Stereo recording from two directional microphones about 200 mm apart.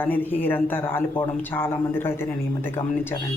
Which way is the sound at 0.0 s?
10° left (ahead or behind).